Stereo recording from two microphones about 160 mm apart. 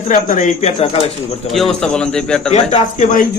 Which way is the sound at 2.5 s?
45° left (ahead or behind).